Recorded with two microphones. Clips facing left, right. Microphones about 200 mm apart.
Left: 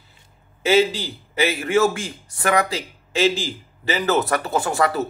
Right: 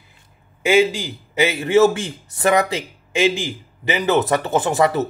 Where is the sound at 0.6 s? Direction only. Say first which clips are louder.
Right 2 dB; 15° right (ahead or behind).